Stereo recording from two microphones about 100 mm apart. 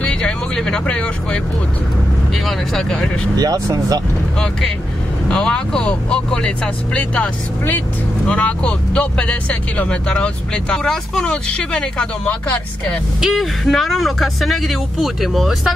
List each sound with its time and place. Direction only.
0.0 s vehicle: 10° left (ahead or behind)
2.3 s speech: centre (ahead or behind)
3.3 s speech: 35° right (ahead or behind)
5.3 s speech: 10° left (ahead or behind)
13.2 s speech: centre (ahead or behind)